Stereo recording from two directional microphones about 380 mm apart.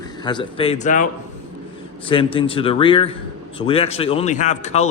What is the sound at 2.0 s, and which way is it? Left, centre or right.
Speech, centre.